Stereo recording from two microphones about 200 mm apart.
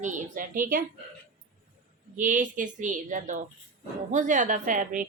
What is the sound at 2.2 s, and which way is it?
A woman's voice, 40° right (ahead or behind).